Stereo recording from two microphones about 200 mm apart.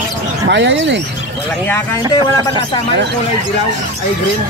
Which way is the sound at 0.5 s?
60° right (ahead or behind).